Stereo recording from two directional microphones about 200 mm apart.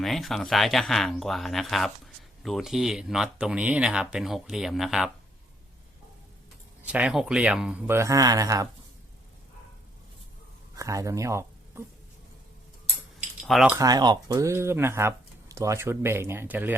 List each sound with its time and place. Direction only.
0.0 s speech: centre (ahead or behind)
6.8 s speech: 5° right (ahead or behind)
10.8 s speech: 15° right (ahead or behind)
13.1 s keys jangling: centre (ahead or behind)
13.7 s speech: 20° right (ahead or behind)